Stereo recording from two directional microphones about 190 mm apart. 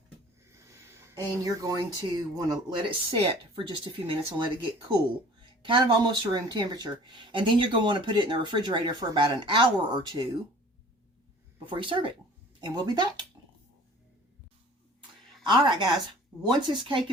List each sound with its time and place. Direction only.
0.5 s speech: 15° right (ahead or behind)
11.6 s speech: 25° right (ahead or behind)
15.4 s speech: 25° right (ahead or behind)